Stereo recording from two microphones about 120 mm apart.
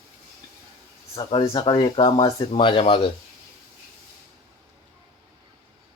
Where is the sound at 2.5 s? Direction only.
45° left (ahead or behind).